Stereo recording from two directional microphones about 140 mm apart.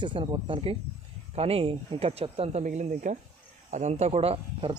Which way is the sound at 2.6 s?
65° right (ahead or behind).